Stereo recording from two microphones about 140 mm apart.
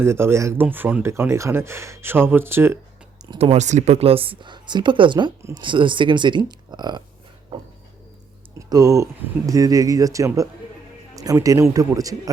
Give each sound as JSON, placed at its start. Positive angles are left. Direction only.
{"t": 0.0, "sound": "speech", "side_deg": -20}
{"t": 3.3, "sound": "speech", "side_deg": -50}
{"t": 8.5, "sound": "speech", "side_deg": -25}